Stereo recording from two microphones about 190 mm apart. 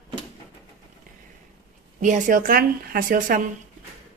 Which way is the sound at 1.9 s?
45° right (ahead or behind).